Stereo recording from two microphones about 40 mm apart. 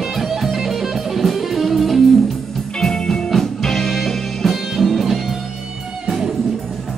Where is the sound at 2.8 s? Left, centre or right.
Centre.